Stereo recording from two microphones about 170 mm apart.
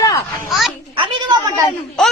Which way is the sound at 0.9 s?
30° right (ahead or behind).